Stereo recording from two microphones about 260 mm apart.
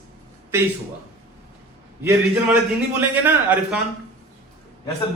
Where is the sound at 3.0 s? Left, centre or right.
Centre.